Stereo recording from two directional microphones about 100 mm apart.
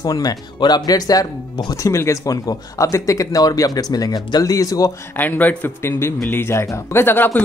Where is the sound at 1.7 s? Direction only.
30° left (ahead or behind).